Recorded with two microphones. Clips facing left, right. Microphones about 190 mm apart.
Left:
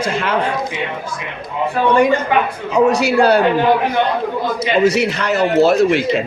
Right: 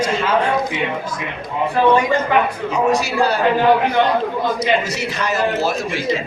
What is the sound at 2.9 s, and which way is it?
Speech, 65° left (ahead or behind).